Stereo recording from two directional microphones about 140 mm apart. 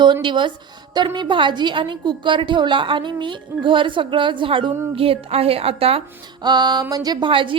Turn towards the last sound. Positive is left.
turn(degrees=-35)  # may be behind; listen again after turning